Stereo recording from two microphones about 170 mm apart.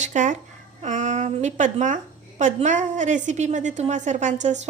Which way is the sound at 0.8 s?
45° right (ahead or behind).